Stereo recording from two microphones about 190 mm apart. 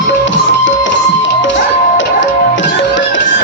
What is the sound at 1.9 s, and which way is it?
Music, 75° left (ahead or behind).